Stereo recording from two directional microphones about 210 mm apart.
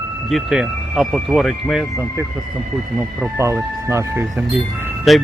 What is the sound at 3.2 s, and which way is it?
Speech, 15° right (ahead or behind).